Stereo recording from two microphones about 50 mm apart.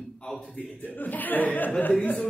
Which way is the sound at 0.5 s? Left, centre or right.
Left.